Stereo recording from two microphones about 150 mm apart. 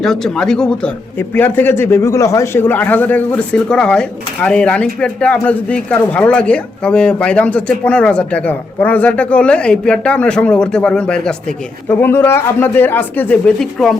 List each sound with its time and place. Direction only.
0.0 s speech: 5° left (ahead or behind)